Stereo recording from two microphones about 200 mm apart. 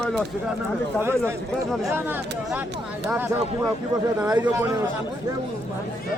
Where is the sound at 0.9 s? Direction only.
10° right (ahead or behind).